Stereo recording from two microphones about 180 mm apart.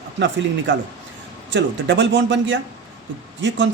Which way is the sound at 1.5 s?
85° right.